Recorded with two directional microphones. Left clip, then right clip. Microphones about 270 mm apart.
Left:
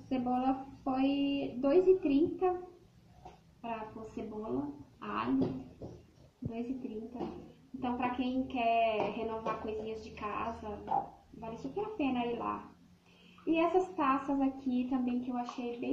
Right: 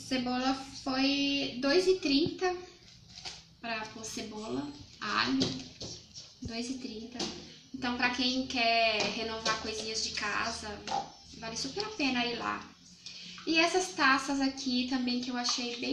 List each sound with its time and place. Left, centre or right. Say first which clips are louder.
0.1 s speech: right 1 dB; right
3.6 s speech: right 3 dB; right
7.8 s speech: right 4 dB; right